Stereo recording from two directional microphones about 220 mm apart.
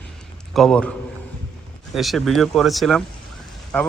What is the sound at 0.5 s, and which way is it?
Speech, centre (ahead or behind).